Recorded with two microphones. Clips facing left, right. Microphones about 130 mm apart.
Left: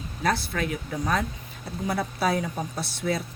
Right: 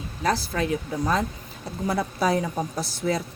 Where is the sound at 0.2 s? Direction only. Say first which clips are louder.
Right 2 dB; 35° right (ahead or behind).